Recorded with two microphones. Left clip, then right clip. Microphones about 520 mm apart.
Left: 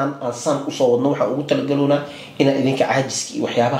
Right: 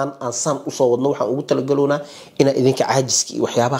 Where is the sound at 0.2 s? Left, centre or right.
Right.